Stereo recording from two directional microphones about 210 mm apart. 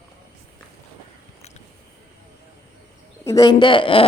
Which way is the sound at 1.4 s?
30° left (ahead or behind).